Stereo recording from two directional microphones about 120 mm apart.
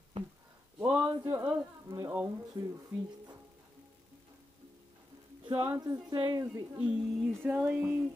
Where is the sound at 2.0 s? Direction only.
15° right (ahead or behind).